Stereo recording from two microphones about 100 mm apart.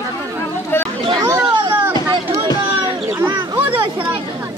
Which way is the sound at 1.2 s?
20° right (ahead or behind).